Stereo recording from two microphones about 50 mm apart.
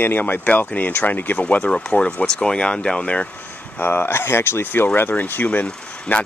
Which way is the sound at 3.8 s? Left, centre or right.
Left.